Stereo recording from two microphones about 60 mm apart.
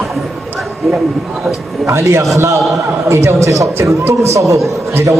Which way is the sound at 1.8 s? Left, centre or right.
Right.